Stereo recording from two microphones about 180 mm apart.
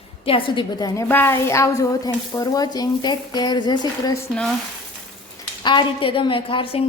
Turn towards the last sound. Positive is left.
turn(degrees=30)  # may be behind; listen again after turning